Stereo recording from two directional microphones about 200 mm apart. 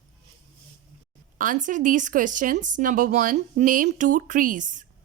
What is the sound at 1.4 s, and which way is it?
Speech, 40° right (ahead or behind).